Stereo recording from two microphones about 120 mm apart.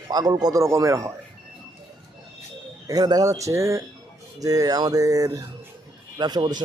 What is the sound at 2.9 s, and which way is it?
A man's voice, 30° right (ahead or behind).